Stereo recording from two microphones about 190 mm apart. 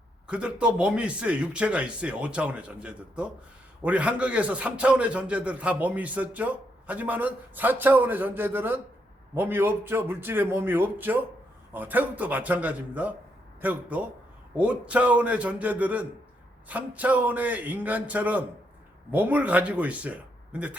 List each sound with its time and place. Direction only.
0.3 s a man's voice: 5° right (ahead or behind)